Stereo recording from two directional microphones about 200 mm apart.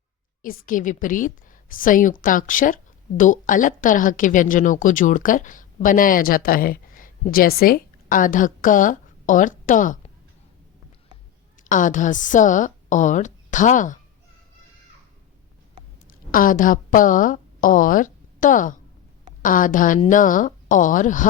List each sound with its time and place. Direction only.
0.4 s a woman's voice: 45° left (ahead or behind)
11.6 s a woman's voice: 40° left (ahead or behind)
16.3 s a woman's voice: 45° left (ahead or behind)